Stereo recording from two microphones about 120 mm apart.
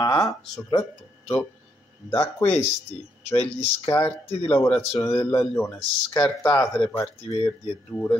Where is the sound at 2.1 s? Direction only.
55° left (ahead or behind).